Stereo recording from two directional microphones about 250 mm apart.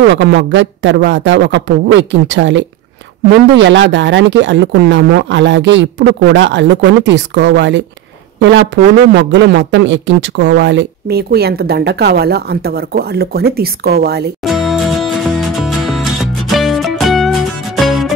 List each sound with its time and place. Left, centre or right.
0.1 s a woman's voice: right
14.4 s music: centre